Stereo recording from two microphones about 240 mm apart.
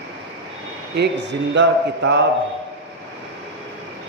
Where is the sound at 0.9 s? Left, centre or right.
Right.